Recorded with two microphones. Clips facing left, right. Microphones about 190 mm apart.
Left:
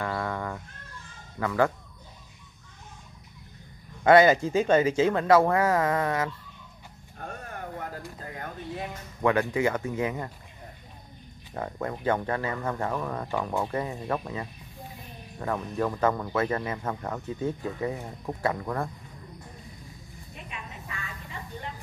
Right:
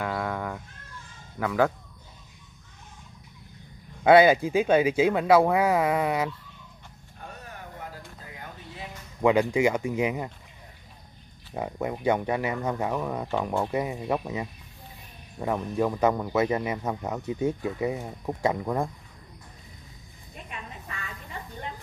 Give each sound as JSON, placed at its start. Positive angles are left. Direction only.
{"t": 0.0, "sound": "a sound", "side_deg": -5}
{"t": 1.4, "sound": "speech", "side_deg": -5}
{"t": 4.0, "sound": "speech", "side_deg": -10}
{"t": 7.2, "sound": "vehicle", "side_deg": 50}
{"t": 8.2, "sound": "a sound", "side_deg": 55}
{"t": 9.2, "sound": "speech", "side_deg": -15}
{"t": 11.5, "sound": "speech", "side_deg": -10}